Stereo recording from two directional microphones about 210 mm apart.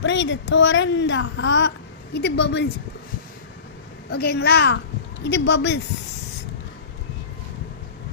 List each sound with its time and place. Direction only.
0.0 s speech: 60° left (ahead or behind)
4.1 s a child's voice: 50° left (ahead or behind)